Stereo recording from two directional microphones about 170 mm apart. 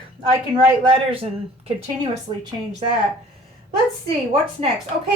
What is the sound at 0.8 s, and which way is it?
A woman's voice, 30° right (ahead or behind).